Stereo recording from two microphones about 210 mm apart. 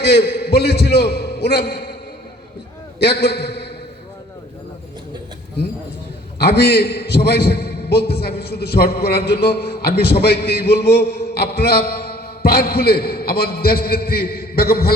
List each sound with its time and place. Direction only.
0.0 s a man's voice: 50° left (ahead or behind)
3.0 s a man's voice: 50° left (ahead or behind)
6.4 s a man's voice: 50° left (ahead or behind)